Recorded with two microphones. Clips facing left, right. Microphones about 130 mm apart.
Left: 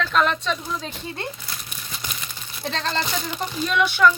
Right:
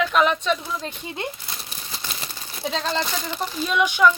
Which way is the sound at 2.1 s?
35° right (ahead or behind).